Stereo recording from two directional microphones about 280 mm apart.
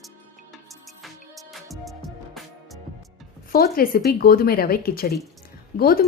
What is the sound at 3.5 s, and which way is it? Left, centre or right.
Speech, left.